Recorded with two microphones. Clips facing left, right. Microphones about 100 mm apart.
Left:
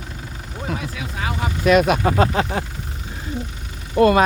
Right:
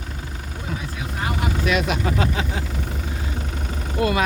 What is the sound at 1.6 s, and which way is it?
Speech, 50° left (ahead or behind).